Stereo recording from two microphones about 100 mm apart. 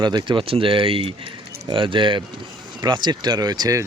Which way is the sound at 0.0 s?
45° right (ahead or behind).